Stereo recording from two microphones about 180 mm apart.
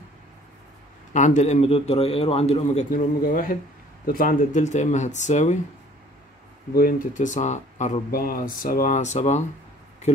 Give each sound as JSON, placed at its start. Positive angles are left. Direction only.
{"t": 1.1, "sound": "a man's voice", "side_deg": 40}
{"t": 6.7, "sound": "speech", "side_deg": 55}